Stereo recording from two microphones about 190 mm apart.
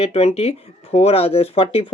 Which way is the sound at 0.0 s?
30° left (ahead or behind).